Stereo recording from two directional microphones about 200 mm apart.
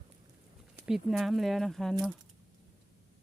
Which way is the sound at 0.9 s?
Centre (ahead or behind).